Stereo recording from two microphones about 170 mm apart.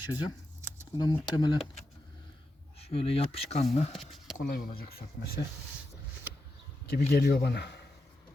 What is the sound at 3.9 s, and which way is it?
Speech, centre (ahead or behind).